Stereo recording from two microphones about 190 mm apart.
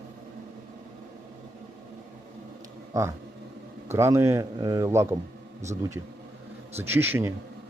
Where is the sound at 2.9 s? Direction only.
15° right (ahead or behind).